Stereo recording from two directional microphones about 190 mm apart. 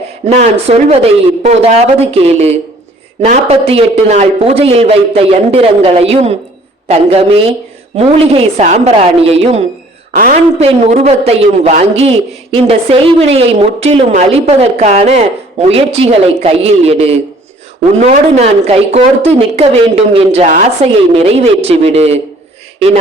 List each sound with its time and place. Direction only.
0.7 s a man's voice: 35° right (ahead or behind)
10.2 s a woman's voice: 45° right (ahead or behind)
10.6 s a man's voice: 35° right (ahead or behind)